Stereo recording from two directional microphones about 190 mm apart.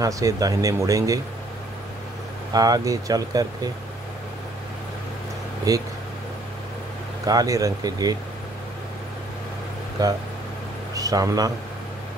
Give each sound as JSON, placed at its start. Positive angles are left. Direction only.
{"t": 0.0, "sound": "speech", "side_deg": -20}
{"t": 2.5, "sound": "speech", "side_deg": -20}
{"t": 5.7, "sound": "speech", "side_deg": -15}
{"t": 7.2, "sound": "speech", "side_deg": -20}
{"t": 10.0, "sound": "speech", "side_deg": -20}